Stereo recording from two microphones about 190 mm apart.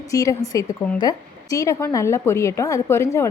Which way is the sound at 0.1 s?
15° left (ahead or behind).